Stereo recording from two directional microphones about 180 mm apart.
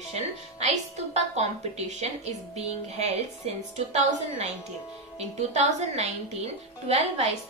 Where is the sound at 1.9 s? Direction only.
40° right (ahead or behind).